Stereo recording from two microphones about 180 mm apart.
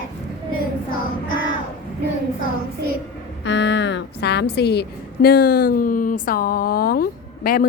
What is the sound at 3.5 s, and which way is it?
A woman's voice, 85° left.